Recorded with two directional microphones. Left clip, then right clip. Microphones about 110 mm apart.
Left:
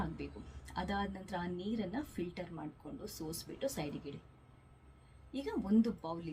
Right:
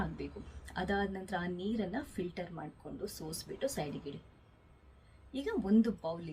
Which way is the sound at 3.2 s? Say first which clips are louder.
Even; centre (ahead or behind).